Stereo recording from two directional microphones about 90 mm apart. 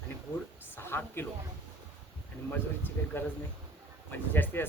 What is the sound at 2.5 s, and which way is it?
A woman's voice, 20° left (ahead or behind).